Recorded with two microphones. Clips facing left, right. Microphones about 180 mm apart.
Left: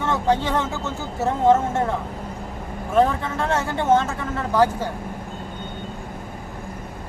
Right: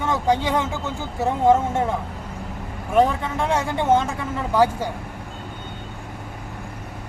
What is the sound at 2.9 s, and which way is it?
Speech, 15° right (ahead or behind).